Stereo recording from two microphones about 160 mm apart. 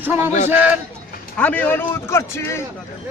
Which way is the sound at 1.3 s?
10° left (ahead or behind).